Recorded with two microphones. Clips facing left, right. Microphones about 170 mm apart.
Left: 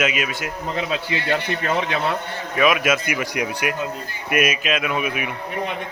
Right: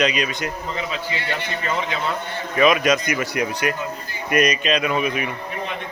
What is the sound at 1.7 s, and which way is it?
Speech, 65° left (ahead or behind).